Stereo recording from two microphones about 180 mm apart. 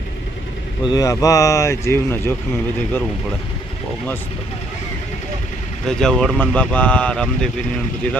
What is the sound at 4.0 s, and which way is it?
Speech, 10° left (ahead or behind).